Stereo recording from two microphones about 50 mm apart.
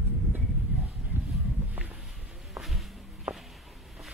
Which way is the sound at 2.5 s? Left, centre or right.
Centre.